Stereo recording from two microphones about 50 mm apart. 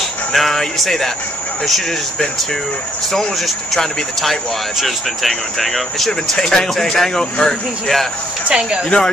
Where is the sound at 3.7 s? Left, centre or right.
Centre.